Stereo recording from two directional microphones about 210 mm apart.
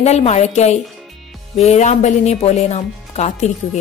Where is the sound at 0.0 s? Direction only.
30° left (ahead or behind).